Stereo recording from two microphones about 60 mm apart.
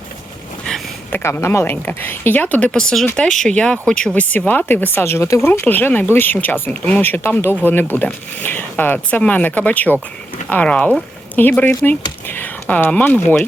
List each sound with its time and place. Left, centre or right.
0.7 s a sound: centre
1.1 s speech: left
1.7 s a woman's voice: left
2.7 s speech: centre
4.1 s speech: left
5.0 s speech: left
5.6 s a woman's voice: left